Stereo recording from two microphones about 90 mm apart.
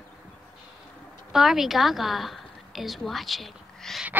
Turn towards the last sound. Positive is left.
turn(degrees=0)  # may be behind; listen again after turning